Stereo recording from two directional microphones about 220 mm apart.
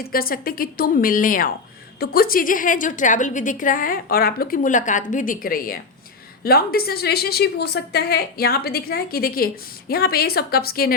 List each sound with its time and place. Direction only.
0.0 s a woman's voice: 40° left (ahead or behind)